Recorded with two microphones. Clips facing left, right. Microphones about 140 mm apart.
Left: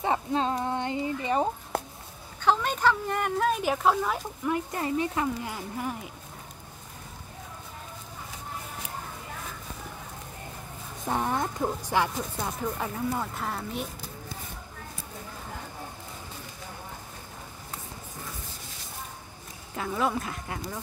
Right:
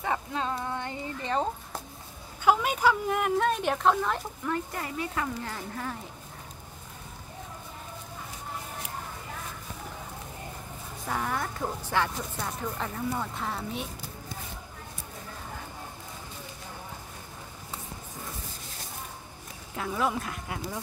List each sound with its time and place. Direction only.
0.0 s speech: 25° left (ahead or behind)
0.7 s a sound: 25° left (ahead or behind)
1.2 s a woman's voice: 10° left (ahead or behind)
2.4 s speech: 10° right (ahead or behind)
4.7 s speech: 25° left (ahead or behind)
11.1 s a woman's voice: 25° left (ahead or behind); by 13.8 s centre (ahead or behind)
19.7 s speech: centre (ahead or behind)